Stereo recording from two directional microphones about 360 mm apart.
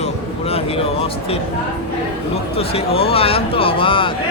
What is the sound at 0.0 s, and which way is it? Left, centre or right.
Vehicle, centre.